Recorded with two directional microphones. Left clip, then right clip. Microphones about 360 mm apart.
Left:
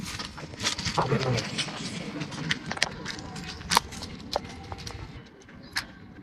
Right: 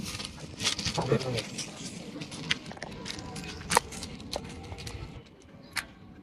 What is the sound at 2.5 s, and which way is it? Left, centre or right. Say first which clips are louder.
Vehicle: even; left.